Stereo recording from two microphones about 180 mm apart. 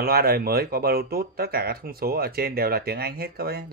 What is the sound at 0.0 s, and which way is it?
Speech, 55° right (ahead or behind).